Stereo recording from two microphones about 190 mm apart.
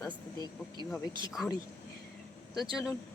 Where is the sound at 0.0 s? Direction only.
20° left (ahead or behind).